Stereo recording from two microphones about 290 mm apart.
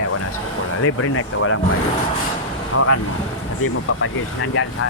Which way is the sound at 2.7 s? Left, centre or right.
Left.